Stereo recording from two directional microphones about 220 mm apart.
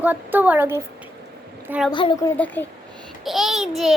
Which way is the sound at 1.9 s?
20° left (ahead or behind).